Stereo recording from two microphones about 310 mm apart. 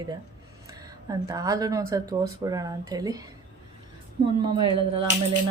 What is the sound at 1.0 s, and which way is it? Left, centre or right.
Speech, centre.